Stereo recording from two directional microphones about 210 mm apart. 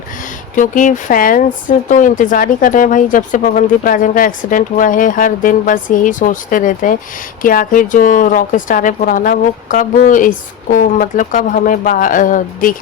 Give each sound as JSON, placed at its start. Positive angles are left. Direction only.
{"t": 0.5, "sound": "a woman's voice", "side_deg": 40}